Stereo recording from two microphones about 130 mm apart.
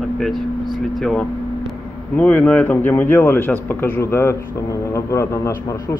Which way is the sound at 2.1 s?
10° left (ahead or behind).